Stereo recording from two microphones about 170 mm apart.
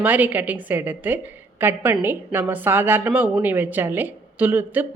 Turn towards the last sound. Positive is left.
turn(degrees=-10)  # may be behind; listen again after turning